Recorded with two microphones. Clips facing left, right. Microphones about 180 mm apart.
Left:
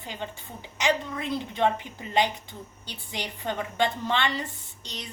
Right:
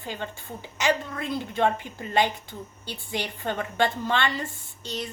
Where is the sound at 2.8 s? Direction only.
20° left (ahead or behind).